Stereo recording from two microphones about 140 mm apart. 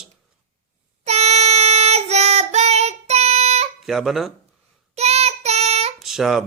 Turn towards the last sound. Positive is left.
turn(degrees=-5)  # may be behind; listen again after turning